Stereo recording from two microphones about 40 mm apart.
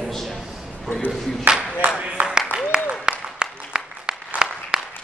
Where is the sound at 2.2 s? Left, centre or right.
Right.